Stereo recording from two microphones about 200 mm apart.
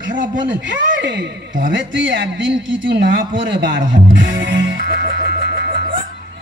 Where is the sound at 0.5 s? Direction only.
65° right (ahead or behind).